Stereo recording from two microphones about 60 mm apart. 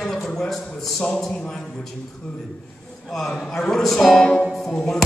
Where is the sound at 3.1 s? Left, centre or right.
Centre.